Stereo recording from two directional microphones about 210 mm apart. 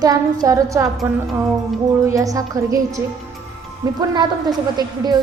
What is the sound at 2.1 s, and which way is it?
A woman's voice, 15° right (ahead or behind).